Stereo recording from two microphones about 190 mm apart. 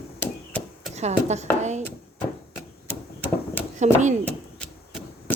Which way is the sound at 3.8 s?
40° right (ahead or behind).